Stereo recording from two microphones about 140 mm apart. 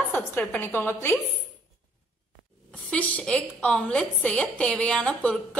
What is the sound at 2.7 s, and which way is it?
A woman's voice, 10° left (ahead or behind).